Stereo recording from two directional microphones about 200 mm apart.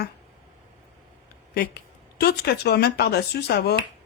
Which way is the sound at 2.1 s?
55° left (ahead or behind).